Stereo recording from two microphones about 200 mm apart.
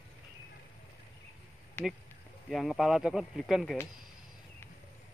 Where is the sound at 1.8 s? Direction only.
10° left (ahead or behind).